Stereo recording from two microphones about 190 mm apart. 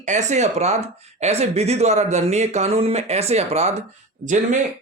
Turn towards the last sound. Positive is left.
turn(degrees=-40)  # may be behind; listen again after turning